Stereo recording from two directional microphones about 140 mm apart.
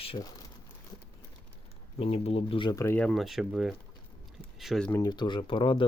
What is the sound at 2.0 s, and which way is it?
Speech, 45° left (ahead or behind).